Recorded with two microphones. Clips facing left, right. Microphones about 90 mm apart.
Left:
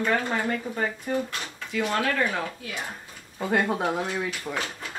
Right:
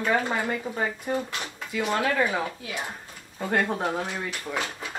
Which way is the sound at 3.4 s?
5° left (ahead or behind).